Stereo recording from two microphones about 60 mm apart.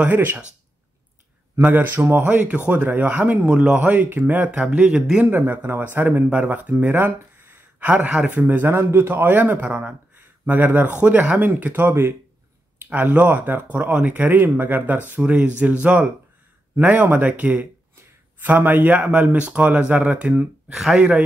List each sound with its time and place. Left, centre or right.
0.0 s speech: right
1.6 s speech: right
2.2 s speech: right
3.9 s speech: right
4.6 s speech: centre
5.2 s speech: right
7.8 s speech: right
20.7 s speech: centre